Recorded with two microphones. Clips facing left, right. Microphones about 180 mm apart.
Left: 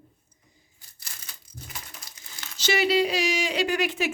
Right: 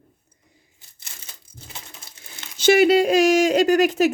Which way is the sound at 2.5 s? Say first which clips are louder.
Right 8 dB; 50° right (ahead or behind).